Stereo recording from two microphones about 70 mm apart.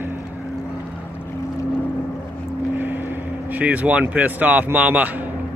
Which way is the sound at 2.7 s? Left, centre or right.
Right.